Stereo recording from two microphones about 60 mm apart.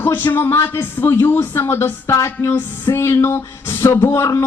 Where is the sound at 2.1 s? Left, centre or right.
Left.